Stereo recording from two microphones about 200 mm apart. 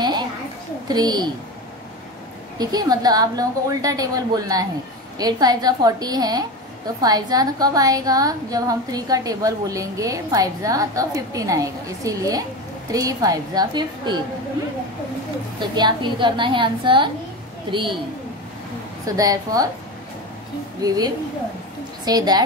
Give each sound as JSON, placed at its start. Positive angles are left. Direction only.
{"t": 0.0, "sound": "a sound", "side_deg": -20}
{"t": 0.8, "sound": "a woman's voice", "side_deg": -20}
{"t": 2.6, "sound": "a woman's voice", "side_deg": -20}
{"t": 15.6, "sound": "a woman's voice", "side_deg": -20}
{"t": 19.0, "sound": "a woman's voice", "side_deg": -15}
{"t": 20.8, "sound": "a woman's voice", "side_deg": -20}